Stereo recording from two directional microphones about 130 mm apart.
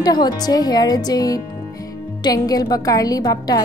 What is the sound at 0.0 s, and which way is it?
A woman's voice, 30° left (ahead or behind).